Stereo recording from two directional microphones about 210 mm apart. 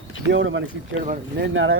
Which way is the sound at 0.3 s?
65° right (ahead or behind).